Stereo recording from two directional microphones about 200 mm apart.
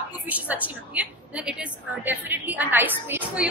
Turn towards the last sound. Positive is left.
turn(degrees=-10)  # may be behind; listen again after turning